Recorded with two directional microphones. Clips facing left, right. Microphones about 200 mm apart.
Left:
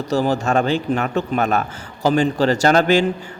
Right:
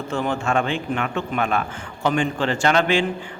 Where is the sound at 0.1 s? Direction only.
40° left (ahead or behind).